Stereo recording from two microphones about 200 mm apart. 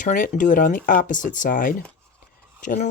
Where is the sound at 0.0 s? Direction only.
40° left (ahead or behind).